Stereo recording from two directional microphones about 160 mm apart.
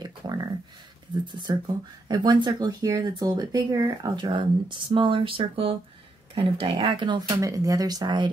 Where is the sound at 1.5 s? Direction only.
25° right (ahead or behind).